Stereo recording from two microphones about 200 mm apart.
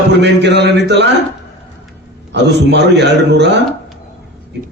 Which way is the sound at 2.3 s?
60° right (ahead or behind).